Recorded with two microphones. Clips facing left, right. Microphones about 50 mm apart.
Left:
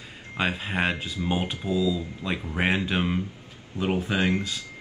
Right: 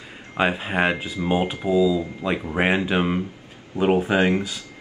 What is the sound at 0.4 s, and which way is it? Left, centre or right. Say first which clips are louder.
Speech: right 5 dB; centre.